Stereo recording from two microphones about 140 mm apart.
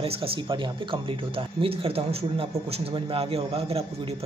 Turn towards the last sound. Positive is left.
turn(degrees=-45)  # may be behind; listen again after turning